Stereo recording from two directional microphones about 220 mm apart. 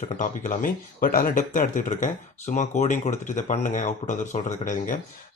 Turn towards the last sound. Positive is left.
turn(degrees=35)  # may be behind; listen again after turning